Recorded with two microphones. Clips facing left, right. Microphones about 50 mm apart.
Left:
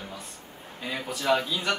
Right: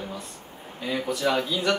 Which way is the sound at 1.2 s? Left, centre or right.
Centre.